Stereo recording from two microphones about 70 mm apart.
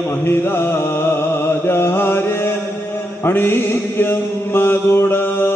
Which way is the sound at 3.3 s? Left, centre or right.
Left.